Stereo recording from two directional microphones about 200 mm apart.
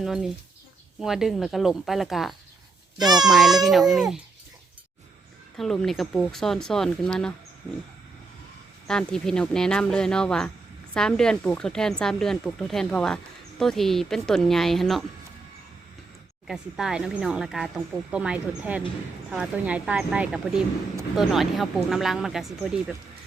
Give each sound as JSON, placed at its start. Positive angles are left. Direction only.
{"t": 0.0, "sound": "speech", "side_deg": 0}
{"t": 3.0, "sound": "a child's voice", "side_deg": -20}
{"t": 3.2, "sound": "speech", "side_deg": 0}
{"t": 5.5, "sound": "speech", "side_deg": 0}
{"t": 8.9, "sound": "speech", "side_deg": 5}
{"t": 16.5, "sound": "speech", "side_deg": 0}